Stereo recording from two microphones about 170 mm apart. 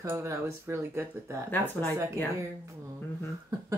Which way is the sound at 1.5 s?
10° left (ahead or behind).